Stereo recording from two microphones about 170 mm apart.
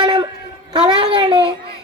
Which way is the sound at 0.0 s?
25° right (ahead or behind).